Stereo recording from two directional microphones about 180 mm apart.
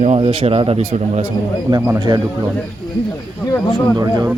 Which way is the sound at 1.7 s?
20° right (ahead or behind).